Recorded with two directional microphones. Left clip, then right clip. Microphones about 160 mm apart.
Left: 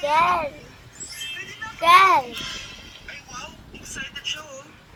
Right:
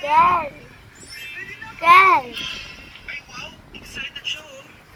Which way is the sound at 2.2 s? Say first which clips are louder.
Right 2 dB; 30° left (ahead or behind).